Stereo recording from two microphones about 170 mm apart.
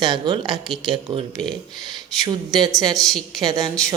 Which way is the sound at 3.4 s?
20° right (ahead or behind).